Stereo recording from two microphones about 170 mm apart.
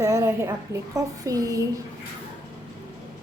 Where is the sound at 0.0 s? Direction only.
15° right (ahead or behind).